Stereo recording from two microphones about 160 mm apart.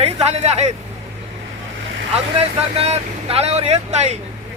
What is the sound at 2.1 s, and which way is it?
Speech, 40° right (ahead or behind).